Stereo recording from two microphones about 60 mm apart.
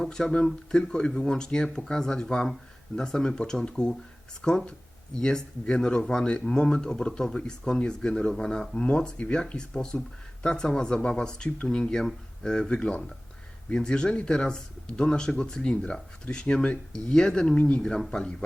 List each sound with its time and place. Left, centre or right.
0.0 s speech: centre
17.8 s speech: centre